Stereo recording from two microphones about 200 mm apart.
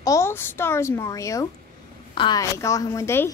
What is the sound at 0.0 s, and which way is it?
A woman's voice, 15° left (ahead or behind).